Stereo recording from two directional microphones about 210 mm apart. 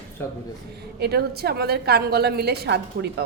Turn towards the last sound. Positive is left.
turn(degrees=-50)  # may be behind; listen again after turning